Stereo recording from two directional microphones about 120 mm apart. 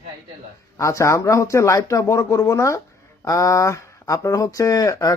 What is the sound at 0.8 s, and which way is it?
Speech, 25° left (ahead or behind).